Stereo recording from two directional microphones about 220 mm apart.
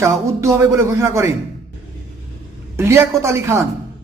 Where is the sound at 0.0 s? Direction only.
15° right (ahead or behind).